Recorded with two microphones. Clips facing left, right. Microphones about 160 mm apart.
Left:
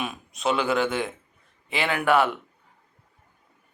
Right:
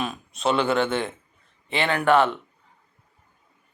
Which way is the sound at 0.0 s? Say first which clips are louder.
Right 2 dB; 5° left (ahead or behind).